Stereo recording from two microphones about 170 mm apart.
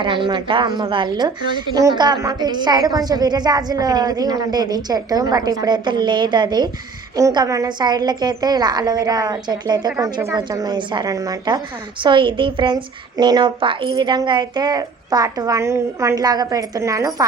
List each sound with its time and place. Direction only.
0.0 s a woman's voice: 25° right (ahead or behind)